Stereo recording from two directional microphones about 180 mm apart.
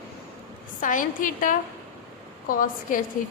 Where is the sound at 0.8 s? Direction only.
45° left (ahead or behind).